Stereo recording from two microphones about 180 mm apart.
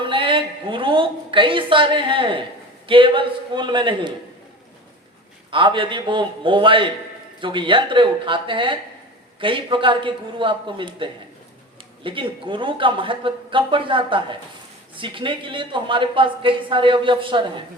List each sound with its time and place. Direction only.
0.0 s a sound: 30° right (ahead or behind)
2.8 s speech: 30° right (ahead or behind)
5.5 s speech: 30° right (ahead or behind)